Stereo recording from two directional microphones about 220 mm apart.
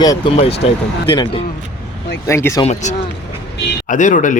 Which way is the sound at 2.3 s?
10° left (ahead or behind).